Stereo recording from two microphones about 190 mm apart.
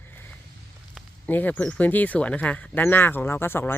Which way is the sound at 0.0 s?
10° left (ahead or behind).